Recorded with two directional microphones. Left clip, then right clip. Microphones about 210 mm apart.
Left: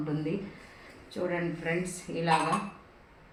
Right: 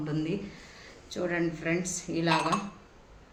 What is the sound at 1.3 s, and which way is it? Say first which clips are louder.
A woman's voice: right 3 dB; 55° right (ahead or behind).